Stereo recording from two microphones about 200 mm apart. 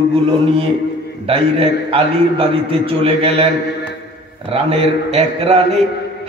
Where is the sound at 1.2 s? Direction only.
30° right (ahead or behind).